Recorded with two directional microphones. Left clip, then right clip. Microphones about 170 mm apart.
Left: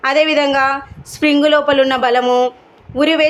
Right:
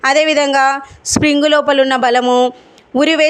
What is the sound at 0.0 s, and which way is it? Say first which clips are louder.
Speech: right 1 dB; 40° right (ahead or behind).